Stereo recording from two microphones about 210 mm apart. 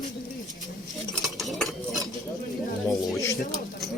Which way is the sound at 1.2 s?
Centre (ahead or behind).